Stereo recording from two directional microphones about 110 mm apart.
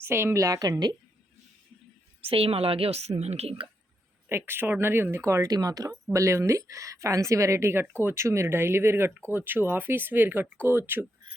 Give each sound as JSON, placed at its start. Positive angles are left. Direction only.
{"t": 0.0, "sound": "a woman's voice", "side_deg": -20}
{"t": 2.2, "sound": "a woman's voice", "side_deg": -60}
{"t": 4.3, "sound": "a woman's voice", "side_deg": -20}